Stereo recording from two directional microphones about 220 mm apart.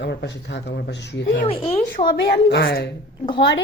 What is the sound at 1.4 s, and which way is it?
Speech, 25° left (ahead or behind).